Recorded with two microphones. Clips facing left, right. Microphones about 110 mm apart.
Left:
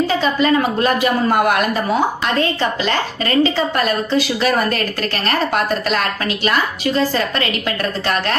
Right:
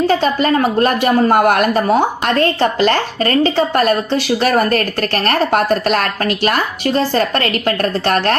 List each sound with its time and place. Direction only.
0.1 s a woman's voice: 50° right (ahead or behind)